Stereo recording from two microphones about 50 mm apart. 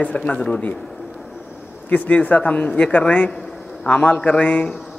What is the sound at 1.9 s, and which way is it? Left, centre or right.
Speech, left.